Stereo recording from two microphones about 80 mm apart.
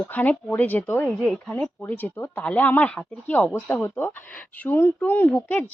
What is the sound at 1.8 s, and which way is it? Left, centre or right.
Speech, left.